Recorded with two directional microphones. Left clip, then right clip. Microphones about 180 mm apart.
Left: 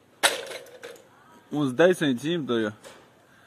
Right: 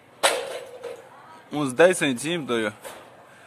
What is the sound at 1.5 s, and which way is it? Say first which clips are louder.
A man's voice: right 2 dB; 35° left (ahead or behind).